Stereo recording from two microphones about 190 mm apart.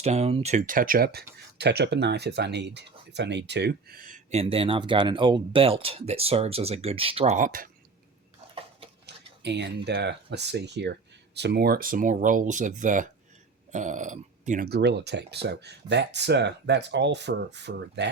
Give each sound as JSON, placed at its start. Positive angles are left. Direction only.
{"t": 0.0, "sound": "speech", "side_deg": -35}
{"t": 7.3, "sound": "speech", "side_deg": -45}
{"t": 9.0, "sound": "speech", "side_deg": -65}
{"t": 14.7, "sound": "speech", "side_deg": -60}